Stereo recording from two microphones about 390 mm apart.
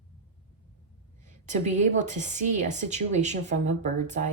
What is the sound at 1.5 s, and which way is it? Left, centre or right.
A woman's voice, centre.